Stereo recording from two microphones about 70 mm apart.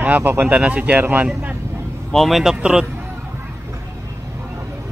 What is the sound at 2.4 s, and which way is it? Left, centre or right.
Speech, centre.